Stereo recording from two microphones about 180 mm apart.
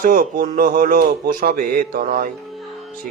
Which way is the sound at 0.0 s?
50° right (ahead or behind).